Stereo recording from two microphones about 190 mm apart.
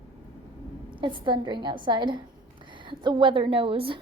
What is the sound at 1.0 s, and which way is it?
A woman's voice, 25° right (ahead or behind).